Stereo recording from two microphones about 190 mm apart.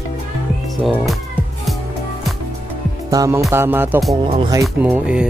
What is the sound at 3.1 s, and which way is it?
Music, 20° right (ahead or behind).